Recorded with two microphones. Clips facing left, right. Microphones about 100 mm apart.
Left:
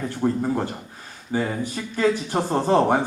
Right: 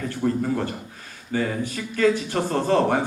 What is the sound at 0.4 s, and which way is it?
A man's voice, 20° left (ahead or behind).